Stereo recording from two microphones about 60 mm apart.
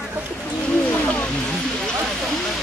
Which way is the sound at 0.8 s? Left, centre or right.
Left.